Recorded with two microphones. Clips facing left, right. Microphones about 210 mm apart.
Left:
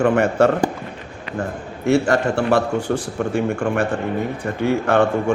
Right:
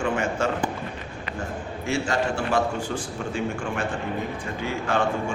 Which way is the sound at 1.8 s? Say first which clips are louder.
Left 9 dB; 65° left (ahead or behind).